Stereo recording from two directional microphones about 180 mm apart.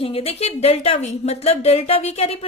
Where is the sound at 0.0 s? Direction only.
35° left (ahead or behind).